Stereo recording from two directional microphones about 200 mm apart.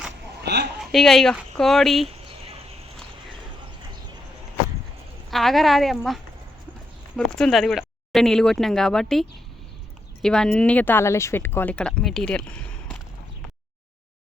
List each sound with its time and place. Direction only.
0.4 s a man's voice: 55° right (ahead or behind)
0.9 s speech: centre (ahead or behind)
2.0 s a sound: 30° right (ahead or behind)
5.3 s speech: centre (ahead or behind)
7.2 s speech: 5° left (ahead or behind)
10.2 s speech: 5° left (ahead or behind)